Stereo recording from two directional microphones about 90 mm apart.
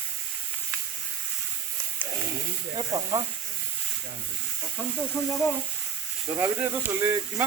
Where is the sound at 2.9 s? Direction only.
40° right (ahead or behind).